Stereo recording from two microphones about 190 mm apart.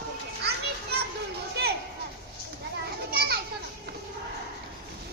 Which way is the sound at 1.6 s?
60° right (ahead or behind).